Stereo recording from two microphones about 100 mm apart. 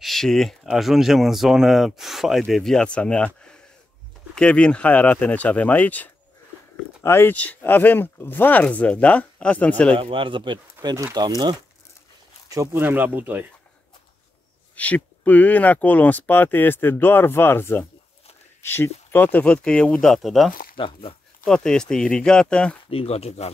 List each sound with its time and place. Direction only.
0.0 s speech: 5° left (ahead or behind)
4.4 s speech: 10° left (ahead or behind)
9.9 s speech: 60° right (ahead or behind); by 11.5 s 45° right (ahead or behind)
12.4 s speech: 30° right (ahead or behind)
12.8 s speech: 20° right (ahead or behind)
14.8 s speech: 15° left (ahead or behind)
20.7 s speech: 60° left (ahead or behind)
21.5 s speech: 5° left (ahead or behind)
22.8 s speech: 80° left